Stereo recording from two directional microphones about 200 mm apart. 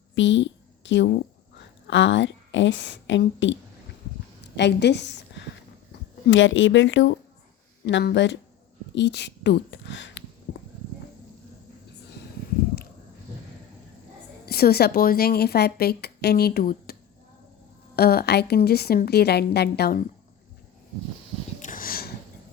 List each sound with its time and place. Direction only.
0.1 s a woman's voice: 65° left (ahead or behind)
14.4 s a woman's voice: 50° left (ahead or behind)
21.6 s sniff: 45° left (ahead or behind)